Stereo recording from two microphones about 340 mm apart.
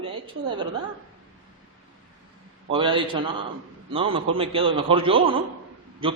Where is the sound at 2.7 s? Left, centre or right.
Centre.